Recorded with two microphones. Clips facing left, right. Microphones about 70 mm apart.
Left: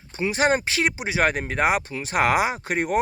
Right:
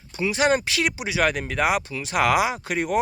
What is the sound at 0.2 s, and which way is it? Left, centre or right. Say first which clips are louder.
Speech: even; left.